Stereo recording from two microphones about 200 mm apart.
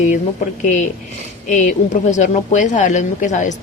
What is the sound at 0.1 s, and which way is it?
A woman's voice, 40° left (ahead or behind).